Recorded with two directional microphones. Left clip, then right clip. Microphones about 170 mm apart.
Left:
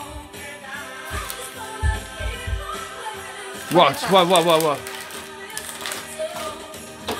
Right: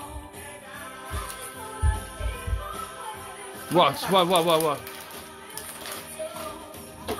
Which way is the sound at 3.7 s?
15° left (ahead or behind).